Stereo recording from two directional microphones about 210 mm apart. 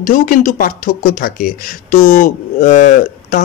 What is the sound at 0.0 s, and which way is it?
Speech, 40° left (ahead or behind).